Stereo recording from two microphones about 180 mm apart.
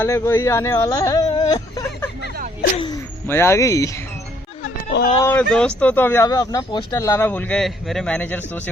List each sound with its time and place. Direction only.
0.0 s speech: 15° left (ahead or behind)
2.7 s a sound: 25° left (ahead or behind)
3.2 s speech: 15° left (ahead or behind)
5.2 s speech: 10° left (ahead or behind)